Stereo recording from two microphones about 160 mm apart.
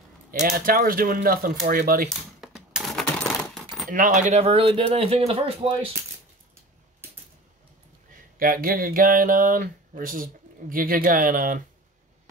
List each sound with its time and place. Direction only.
0.3 s speech: 65° right (ahead or behind)
2.0 s coin: 5° right (ahead or behind)
3.9 s speech: 55° right (ahead or behind); by 5.9 s 40° right (ahead or behind)
8.4 s speech: 65° right (ahead or behind)